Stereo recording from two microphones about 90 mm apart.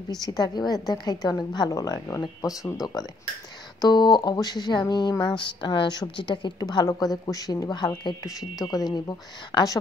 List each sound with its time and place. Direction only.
0.1 s a woman's voice: 45° left (ahead or behind)
8.2 s speech: 40° left (ahead or behind)